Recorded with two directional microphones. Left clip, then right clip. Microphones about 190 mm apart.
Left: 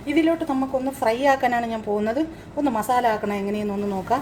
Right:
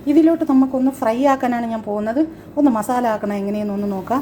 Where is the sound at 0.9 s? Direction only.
10° right (ahead or behind).